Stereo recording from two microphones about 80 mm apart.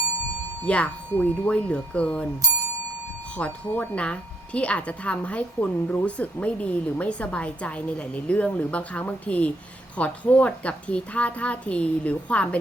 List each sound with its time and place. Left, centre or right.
0.6 s a woman's voice: centre
3.3 s a woman's voice: centre